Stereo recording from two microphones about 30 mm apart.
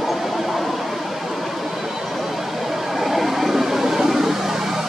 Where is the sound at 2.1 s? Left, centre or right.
Centre.